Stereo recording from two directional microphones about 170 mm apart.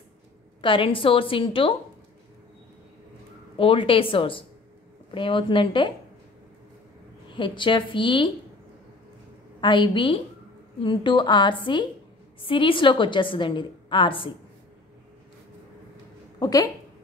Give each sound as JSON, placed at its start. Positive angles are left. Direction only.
{"t": 0.6, "sound": "a woman's voice", "side_deg": 30}
{"t": 3.5, "sound": "a woman's voice", "side_deg": 30}
{"t": 7.2, "sound": "a woman's voice", "side_deg": 30}
{"t": 9.6, "sound": "a woman's voice", "side_deg": 30}
{"t": 16.3, "sound": "a woman's voice", "side_deg": 20}